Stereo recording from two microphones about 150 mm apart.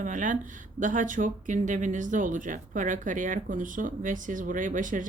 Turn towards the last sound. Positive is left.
turn(degrees=-60)  # may be behind; listen again after turning